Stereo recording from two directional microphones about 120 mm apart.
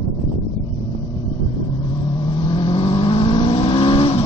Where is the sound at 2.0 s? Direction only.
40° left (ahead or behind).